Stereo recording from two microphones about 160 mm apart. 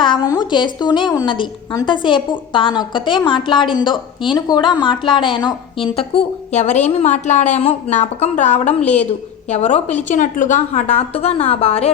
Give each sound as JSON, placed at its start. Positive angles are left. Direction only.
{"t": 0.0, "sound": "a woman's voice", "side_deg": 25}
{"t": 6.0, "sound": "a woman's voice", "side_deg": 40}